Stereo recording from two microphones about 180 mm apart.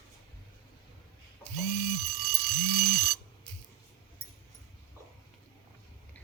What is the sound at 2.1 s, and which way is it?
Alarm, 60° right (ahead or behind).